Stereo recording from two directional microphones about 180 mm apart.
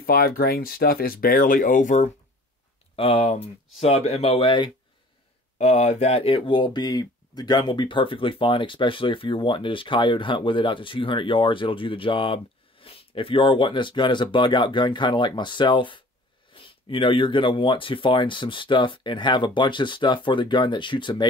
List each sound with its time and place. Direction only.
0.0 s speech: 55° left (ahead or behind)
3.0 s speech: 30° left (ahead or behind)
5.6 s speech: 40° left (ahead or behind)